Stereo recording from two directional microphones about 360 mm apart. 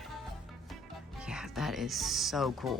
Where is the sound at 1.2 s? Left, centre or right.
Centre.